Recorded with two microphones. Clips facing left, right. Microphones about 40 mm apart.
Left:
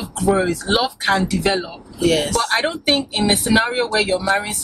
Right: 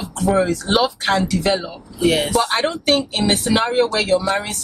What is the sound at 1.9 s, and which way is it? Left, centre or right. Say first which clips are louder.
Speech: right 1 dB; centre.